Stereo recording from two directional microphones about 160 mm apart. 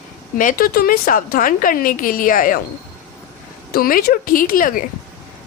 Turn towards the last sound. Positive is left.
turn(degrees=60)  # may be behind; listen again after turning